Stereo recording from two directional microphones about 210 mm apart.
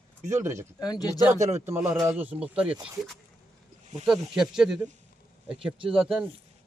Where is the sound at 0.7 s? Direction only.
20° left (ahead or behind).